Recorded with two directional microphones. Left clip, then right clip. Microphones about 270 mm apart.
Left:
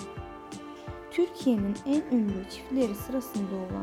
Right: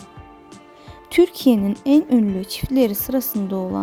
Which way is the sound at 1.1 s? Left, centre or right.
Right.